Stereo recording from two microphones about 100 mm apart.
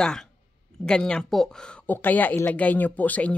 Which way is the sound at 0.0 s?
5° left (ahead or behind).